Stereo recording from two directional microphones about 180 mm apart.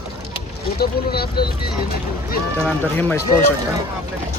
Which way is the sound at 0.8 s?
60° left (ahead or behind).